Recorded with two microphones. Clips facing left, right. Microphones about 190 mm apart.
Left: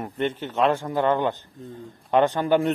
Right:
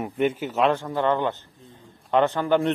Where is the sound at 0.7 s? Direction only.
10° left (ahead or behind).